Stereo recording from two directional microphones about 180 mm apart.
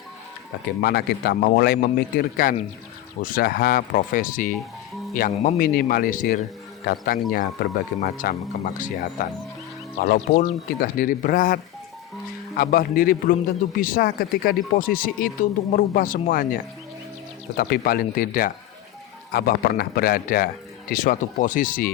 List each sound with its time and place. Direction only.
0.8 s a man's voice: 65° left (ahead or behind)
17.6 s a man's voice: 55° left (ahead or behind)